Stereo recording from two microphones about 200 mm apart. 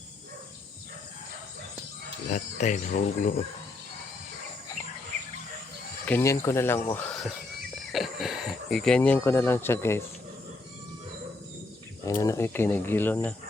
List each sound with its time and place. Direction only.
2.3 s speech: 35° left (ahead or behind)
6.1 s speech: 10° left (ahead or behind)
12.0 s speech: 15° left (ahead or behind)